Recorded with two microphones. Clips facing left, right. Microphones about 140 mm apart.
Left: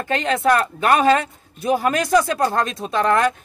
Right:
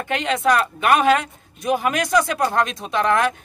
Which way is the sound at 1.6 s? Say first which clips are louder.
Left 2 dB; centre (ahead or behind).